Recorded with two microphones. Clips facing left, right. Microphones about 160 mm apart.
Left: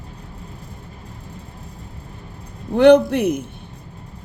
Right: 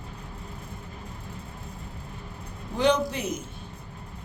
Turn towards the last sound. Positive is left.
turn(degrees=60)  # may be behind; listen again after turning